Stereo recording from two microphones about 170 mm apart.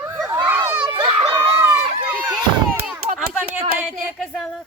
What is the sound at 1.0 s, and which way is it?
Children playing, 30° right (ahead or behind).